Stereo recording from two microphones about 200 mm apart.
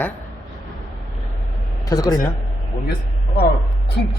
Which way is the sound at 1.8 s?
20° left (ahead or behind).